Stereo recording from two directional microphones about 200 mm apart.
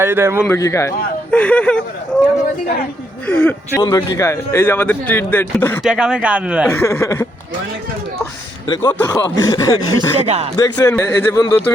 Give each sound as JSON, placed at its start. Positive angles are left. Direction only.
{"t": 0.0, "sound": "a man's voice", "side_deg": -10}
{"t": 0.4, "sound": "speech", "side_deg": 15}
{"t": 3.2, "sound": "speech", "side_deg": 5}
{"t": 5.8, "sound": "speech", "side_deg": -5}
{"t": 6.7, "sound": "speech", "side_deg": 10}
{"t": 8.6, "sound": "speech", "side_deg": 20}
{"t": 10.2, "sound": "speech", "side_deg": -30}
{"t": 10.6, "sound": "speech", "side_deg": 15}